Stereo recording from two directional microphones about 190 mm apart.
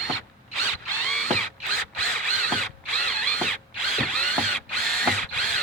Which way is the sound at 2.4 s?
5° left (ahead or behind).